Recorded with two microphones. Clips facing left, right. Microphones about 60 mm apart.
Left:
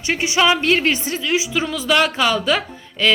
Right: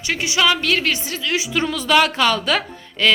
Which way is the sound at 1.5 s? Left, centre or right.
Centre.